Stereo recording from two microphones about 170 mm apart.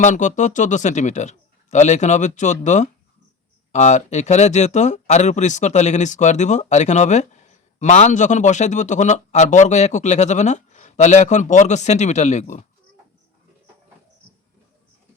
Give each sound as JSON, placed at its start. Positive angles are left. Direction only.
{"t": 0.0, "sound": "speech", "side_deg": 45}